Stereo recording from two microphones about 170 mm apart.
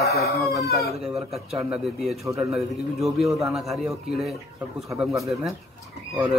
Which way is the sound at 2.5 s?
Centre (ahead or behind).